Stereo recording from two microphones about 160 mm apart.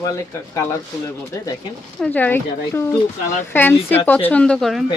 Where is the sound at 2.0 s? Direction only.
10° left (ahead or behind).